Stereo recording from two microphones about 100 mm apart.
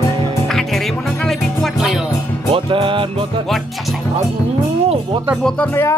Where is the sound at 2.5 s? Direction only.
60° right (ahead or behind).